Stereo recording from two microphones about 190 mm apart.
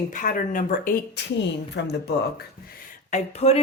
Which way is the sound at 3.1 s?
35° left (ahead or behind).